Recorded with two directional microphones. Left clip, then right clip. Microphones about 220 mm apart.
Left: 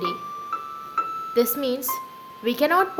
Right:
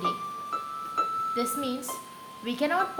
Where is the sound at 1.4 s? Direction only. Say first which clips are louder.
Left 7 dB; 50° left (ahead or behind).